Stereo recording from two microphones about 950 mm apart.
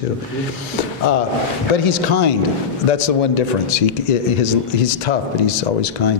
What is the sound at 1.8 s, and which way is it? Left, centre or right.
A man's voice, left.